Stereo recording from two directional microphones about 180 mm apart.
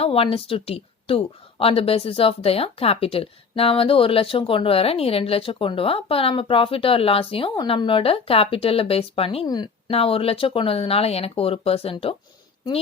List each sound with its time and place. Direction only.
0.0 s a woman's voice: 30° left (ahead or behind)